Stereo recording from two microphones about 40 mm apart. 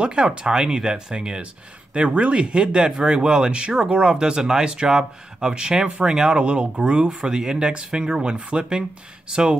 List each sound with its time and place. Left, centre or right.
0.0 s speech: right
6.3 s speech: right